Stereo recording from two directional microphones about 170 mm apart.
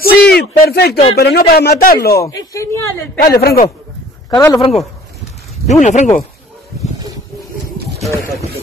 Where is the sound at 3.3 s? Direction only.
65° left (ahead or behind).